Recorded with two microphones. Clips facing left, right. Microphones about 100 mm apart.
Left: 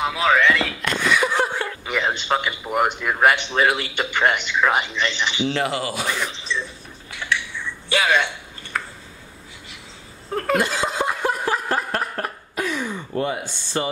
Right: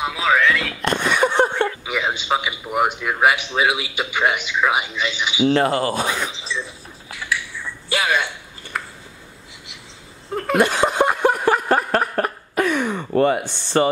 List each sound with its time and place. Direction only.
0.0 s a sound: centre (ahead or behind)
1.7 s a man's voice: 5° right (ahead or behind)
5.4 s speech: 40° right (ahead or behind)
6.2 s speech: 5° right (ahead or behind)
7.2 s finger snapping: 5° right (ahead or behind)
8.7 s a sound: 5° right (ahead or behind)
10.3 s laughter: 5° right (ahead or behind)
10.6 s snicker: 65° right (ahead or behind)